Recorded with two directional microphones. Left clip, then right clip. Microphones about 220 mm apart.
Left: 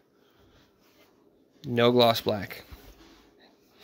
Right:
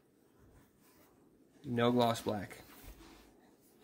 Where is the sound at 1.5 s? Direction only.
40° left (ahead or behind).